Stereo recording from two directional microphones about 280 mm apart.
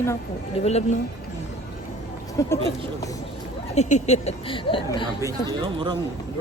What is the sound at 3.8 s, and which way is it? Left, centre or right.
Speech, left.